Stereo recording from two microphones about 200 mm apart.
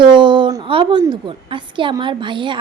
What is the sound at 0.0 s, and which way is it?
A woman's voice, 25° right (ahead or behind).